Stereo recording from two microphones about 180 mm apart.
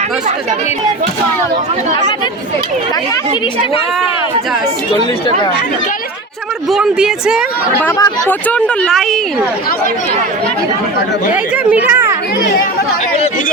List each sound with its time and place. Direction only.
6.7 s speech: 5° right (ahead or behind)
7.9 s speech: 15° left (ahead or behind)
11.5 s a woman's voice: 10° right (ahead or behind)